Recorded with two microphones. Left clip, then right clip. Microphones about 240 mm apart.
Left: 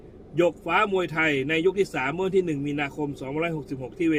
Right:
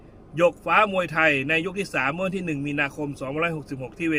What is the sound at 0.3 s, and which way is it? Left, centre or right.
Speech, centre.